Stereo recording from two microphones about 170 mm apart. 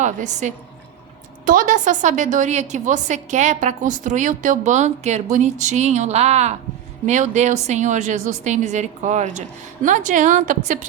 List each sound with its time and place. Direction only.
0.0 s a woman's voice: 45° right (ahead or behind)